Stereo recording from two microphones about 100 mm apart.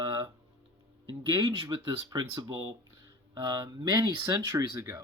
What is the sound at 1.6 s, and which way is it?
Speech, 55° right (ahead or behind).